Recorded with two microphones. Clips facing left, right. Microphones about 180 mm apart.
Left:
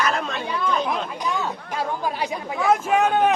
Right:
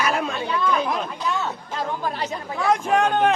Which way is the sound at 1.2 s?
15° left (ahead or behind).